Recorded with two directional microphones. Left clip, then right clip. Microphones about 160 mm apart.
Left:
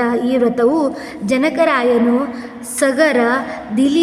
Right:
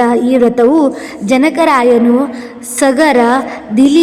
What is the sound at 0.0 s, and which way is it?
A woman's voice, 25° right (ahead or behind).